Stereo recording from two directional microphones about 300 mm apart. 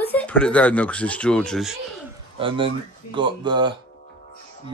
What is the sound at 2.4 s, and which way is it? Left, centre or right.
Speech, centre.